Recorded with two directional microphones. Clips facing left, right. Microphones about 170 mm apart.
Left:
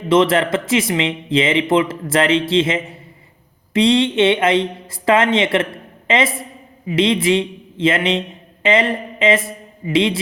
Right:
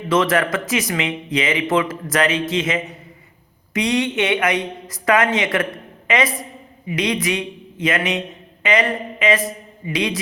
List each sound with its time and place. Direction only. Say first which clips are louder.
0.1 s a woman's voice: left 4 dB; 25° left (ahead or behind)